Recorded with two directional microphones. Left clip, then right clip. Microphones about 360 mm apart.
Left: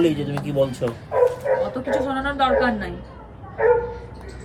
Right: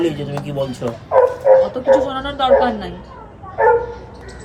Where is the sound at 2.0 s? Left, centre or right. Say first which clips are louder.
Right 1 dB; centre.